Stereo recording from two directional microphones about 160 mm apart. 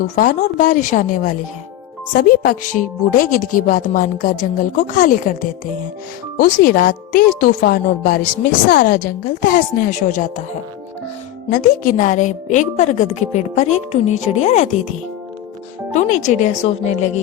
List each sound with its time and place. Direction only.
0.0 s speech: 55° left (ahead or behind)
2.1 s speech: 65° left (ahead or behind)
11.4 s a woman's voice: 60° left (ahead or behind)